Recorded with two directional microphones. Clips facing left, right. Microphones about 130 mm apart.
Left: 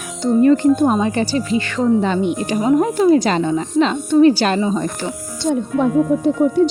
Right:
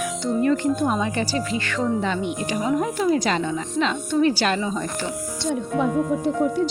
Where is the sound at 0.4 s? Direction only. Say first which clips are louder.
Left 8 dB; 30° left (ahead or behind).